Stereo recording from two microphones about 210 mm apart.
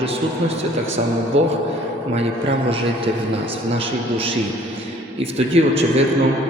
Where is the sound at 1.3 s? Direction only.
65° right (ahead or behind).